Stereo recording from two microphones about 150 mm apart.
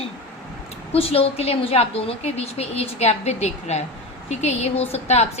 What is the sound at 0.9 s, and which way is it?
Speech, 40° left (ahead or behind).